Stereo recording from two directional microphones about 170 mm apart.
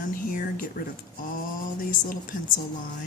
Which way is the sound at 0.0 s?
55° left (ahead or behind).